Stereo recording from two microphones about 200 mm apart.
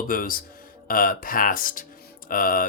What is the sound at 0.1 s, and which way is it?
Speech, 45° left (ahead or behind).